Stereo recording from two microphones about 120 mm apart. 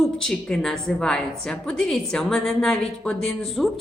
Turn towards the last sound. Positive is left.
turn(degrees=0)  # may be behind; listen again after turning